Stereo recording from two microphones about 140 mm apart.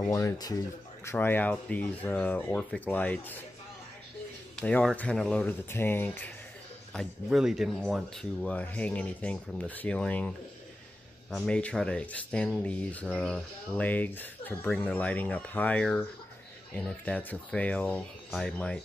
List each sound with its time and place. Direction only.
0.1 s speech: 25° left (ahead or behind)
4.6 s speech: 5° left (ahead or behind)
6.9 s speech: centre (ahead or behind)